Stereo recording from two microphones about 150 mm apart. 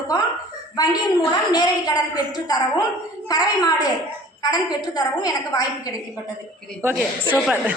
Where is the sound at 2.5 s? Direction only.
30° left (ahead or behind).